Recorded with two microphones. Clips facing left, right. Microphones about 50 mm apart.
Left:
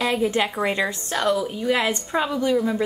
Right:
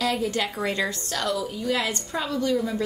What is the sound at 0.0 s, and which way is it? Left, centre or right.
A woman's voice, left.